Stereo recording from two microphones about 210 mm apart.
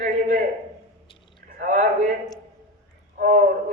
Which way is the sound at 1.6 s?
40° right (ahead or behind).